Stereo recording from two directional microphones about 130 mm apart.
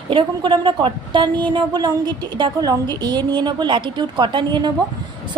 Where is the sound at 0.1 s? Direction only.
40° right (ahead or behind).